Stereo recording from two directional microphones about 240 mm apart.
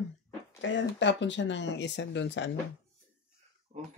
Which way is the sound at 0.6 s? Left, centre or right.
Left.